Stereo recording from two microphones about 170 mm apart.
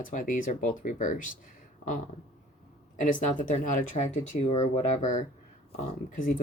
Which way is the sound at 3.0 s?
50° left (ahead or behind).